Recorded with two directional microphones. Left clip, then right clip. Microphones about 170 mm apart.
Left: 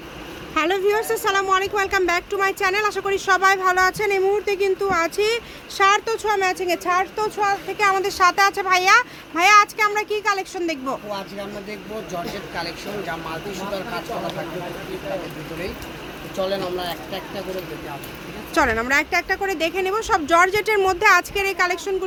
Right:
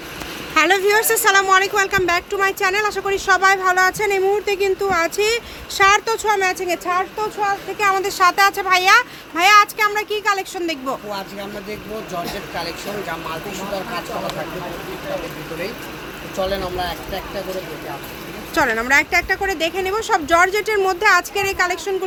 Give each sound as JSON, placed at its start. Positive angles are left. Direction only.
{"t": 0.5, "sound": "speech", "side_deg": -5}
{"t": 7.8, "sound": "speech", "side_deg": 5}
{"t": 12.5, "sound": "speech", "side_deg": 10}
{"t": 16.4, "sound": "speech", "side_deg": 15}
{"t": 18.5, "sound": "speech", "side_deg": 10}
{"t": 18.9, "sound": "speech", "side_deg": 0}